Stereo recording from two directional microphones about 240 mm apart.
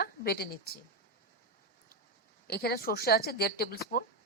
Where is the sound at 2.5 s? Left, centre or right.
Left.